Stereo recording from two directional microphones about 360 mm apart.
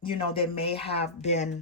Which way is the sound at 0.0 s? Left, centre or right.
Centre.